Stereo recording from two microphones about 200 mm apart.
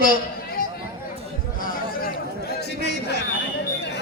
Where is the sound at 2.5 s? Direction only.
55° left (ahead or behind).